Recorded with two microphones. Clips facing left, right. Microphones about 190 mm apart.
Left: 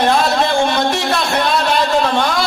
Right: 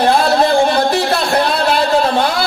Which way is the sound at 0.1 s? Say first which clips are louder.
Right 3 dB; 35° right (ahead or behind).